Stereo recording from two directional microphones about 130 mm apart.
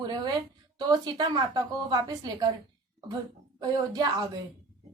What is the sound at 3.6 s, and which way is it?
Speech, 30° right (ahead or behind).